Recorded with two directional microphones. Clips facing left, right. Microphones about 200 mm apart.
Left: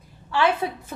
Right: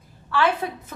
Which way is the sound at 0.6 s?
25° left (ahead or behind).